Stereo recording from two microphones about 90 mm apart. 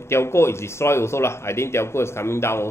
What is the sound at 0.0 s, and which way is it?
Speech, 30° left (ahead or behind).